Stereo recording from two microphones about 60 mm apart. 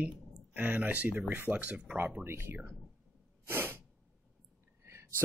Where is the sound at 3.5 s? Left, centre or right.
Right.